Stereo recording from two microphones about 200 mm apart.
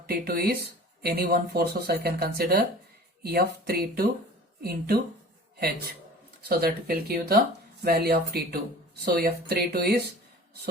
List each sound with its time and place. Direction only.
0.0 s speech: 50° right (ahead or behind)